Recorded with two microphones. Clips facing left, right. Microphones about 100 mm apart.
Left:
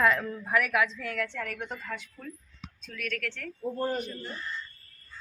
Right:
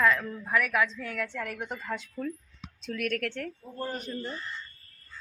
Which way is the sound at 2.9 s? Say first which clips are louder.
Right 5 dB; 55° right (ahead or behind).